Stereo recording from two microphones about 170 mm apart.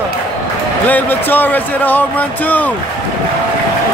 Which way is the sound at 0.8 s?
10° left (ahead or behind).